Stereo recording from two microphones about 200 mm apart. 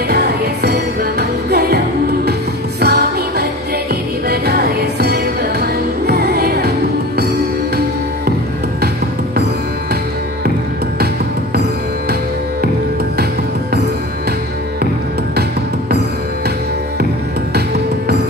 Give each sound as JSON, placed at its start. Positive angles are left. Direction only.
{"t": 0.1, "sound": "music", "side_deg": -55}
{"t": 2.8, "sound": "music", "side_deg": -55}